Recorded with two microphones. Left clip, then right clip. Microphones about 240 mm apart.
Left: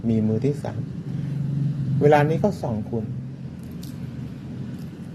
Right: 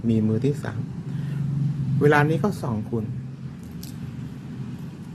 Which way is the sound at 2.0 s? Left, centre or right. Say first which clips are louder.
Left 2 dB; centre.